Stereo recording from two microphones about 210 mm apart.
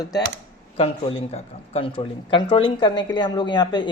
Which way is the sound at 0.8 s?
30° left (ahead or behind).